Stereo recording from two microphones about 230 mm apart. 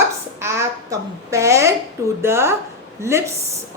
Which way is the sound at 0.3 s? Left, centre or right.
Centre.